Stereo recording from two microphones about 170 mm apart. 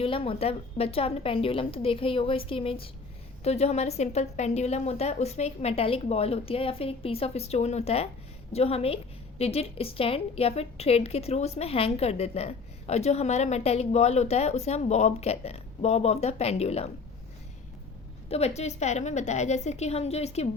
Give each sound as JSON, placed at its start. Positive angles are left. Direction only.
{"t": 0.0, "sound": "a woman's voice", "side_deg": 35}
{"t": 18.3, "sound": "a woman's voice", "side_deg": 40}